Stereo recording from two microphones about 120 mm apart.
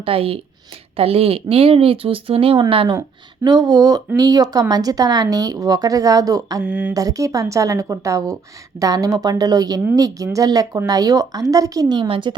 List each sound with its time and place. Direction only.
0.0 s speech: 50° right (ahead or behind)
3.4 s speech: 35° right (ahead or behind)
6.6 s a sound: 10° right (ahead or behind)
6.9 s speech: 30° right (ahead or behind); by 12.3 s 45° right (ahead or behind)